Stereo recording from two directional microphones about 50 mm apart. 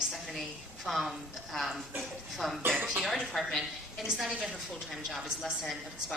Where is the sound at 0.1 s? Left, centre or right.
Centre.